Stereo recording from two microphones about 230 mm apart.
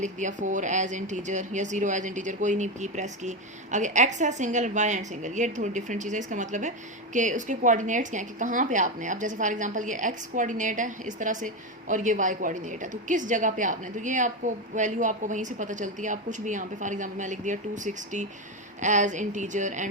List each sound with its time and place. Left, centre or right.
0.0 s speech: right